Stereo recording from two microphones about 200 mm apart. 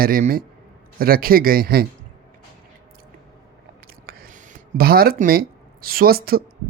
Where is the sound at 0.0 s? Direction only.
45° right (ahead or behind).